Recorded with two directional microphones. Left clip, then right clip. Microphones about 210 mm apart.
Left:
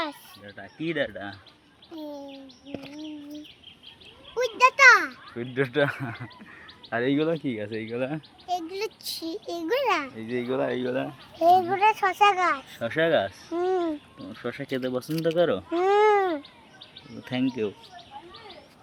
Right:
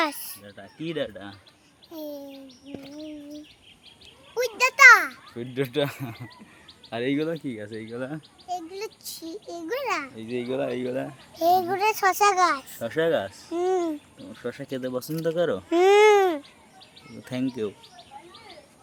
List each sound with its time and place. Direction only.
0.0 s a sound: 35° right (ahead or behind)
0.9 s a child's voice: 10° right (ahead or behind)
4.4 s a child's voice: 20° right (ahead or behind)
5.4 s a child's voice: 5° right (ahead or behind); by 8.2 s 10° left (ahead or behind)
8.4 s a child's voice: 40° left (ahead or behind)
10.4 s a child's voice: centre (ahead or behind)
12.7 s a child's voice: centre (ahead or behind)
13.5 s speech: 10° right (ahead or behind)
14.3 s a child's voice: centre (ahead or behind)
15.7 s speech: 20° right (ahead or behind)
17.2 s a child's voice: 5° right (ahead or behind)